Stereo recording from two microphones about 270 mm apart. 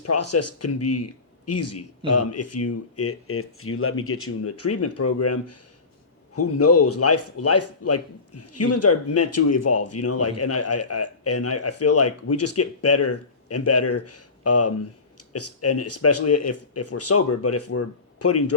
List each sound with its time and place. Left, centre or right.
0.0 s speech: left